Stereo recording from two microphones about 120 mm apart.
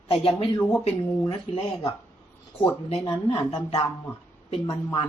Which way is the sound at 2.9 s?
50° left (ahead or behind).